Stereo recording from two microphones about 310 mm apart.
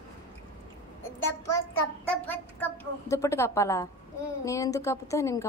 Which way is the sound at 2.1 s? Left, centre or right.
Centre.